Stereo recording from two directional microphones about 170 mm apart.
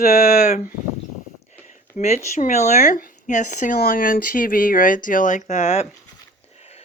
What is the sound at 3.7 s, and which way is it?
Speech, 60° left (ahead or behind).